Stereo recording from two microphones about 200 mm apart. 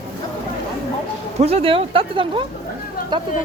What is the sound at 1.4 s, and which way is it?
Speech, 30° right (ahead or behind).